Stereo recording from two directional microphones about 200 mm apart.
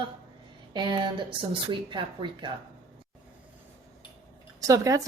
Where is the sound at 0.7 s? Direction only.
25° right (ahead or behind).